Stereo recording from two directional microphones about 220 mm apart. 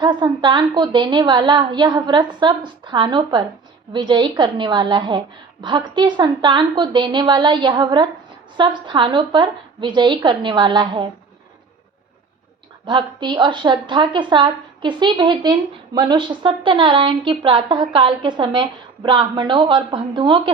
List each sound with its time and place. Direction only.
0.0 s a woman's voice: 20° right (ahead or behind)
12.8 s a woman's voice: 20° right (ahead or behind)